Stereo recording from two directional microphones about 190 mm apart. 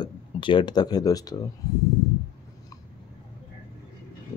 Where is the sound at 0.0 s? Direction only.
25° left (ahead or behind).